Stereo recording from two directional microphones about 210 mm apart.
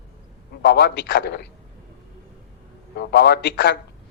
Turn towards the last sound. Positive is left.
turn(degrees=55)  # may be behind; listen again after turning